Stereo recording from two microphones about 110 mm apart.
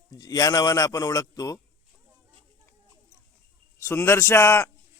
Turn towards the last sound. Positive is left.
turn(degrees=25)  # may be behind; listen again after turning